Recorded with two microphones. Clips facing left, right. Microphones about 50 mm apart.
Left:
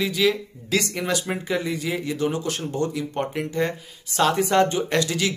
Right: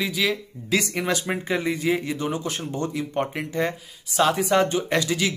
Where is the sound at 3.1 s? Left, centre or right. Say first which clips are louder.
Even; centre.